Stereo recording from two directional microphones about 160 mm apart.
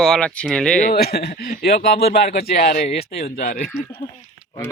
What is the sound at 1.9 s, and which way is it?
Speech, 80° left.